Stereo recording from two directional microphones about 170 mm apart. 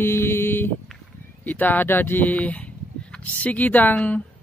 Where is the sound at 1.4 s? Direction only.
10° left (ahead or behind).